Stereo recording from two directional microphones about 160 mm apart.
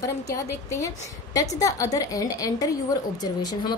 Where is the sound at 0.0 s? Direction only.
20° left (ahead or behind).